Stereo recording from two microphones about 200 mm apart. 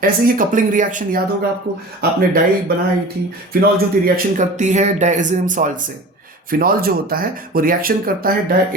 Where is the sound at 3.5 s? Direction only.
50° right (ahead or behind).